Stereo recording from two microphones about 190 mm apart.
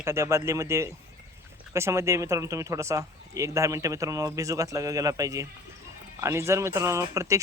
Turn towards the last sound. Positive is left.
turn(degrees=-15)  # may be behind; listen again after turning